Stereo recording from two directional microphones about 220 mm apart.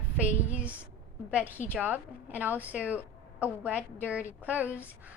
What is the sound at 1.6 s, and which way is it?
Speech, 35° left (ahead or behind).